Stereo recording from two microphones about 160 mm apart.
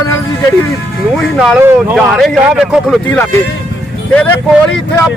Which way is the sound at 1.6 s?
15° right (ahead or behind).